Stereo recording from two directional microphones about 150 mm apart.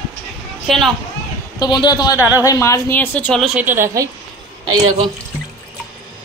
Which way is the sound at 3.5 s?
15° right (ahead or behind).